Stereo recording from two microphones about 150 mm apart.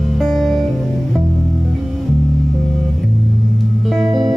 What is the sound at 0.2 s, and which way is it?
Music, centre (ahead or behind).